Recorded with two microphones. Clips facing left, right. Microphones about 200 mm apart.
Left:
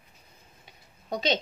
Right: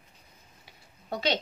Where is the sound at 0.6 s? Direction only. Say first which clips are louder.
Left 2 dB; 20° left (ahead or behind).